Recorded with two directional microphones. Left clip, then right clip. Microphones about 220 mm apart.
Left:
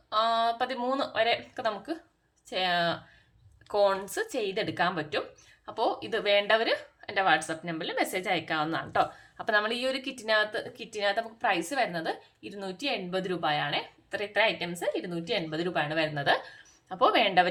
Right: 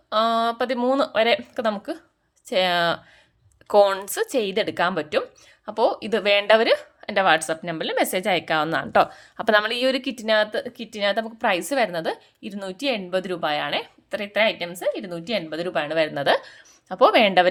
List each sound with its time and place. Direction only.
0.1 s a woman's voice: 50° right (ahead or behind)